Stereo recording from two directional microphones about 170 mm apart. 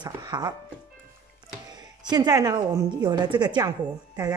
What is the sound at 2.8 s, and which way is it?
Speech, 25° right (ahead or behind).